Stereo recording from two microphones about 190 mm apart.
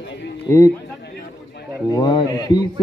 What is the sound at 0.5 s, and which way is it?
Speech, 15° left (ahead or behind).